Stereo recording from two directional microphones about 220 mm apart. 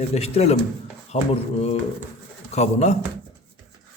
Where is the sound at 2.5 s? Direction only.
30° left (ahead or behind).